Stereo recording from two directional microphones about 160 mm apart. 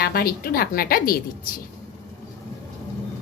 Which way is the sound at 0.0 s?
70° left (ahead or behind).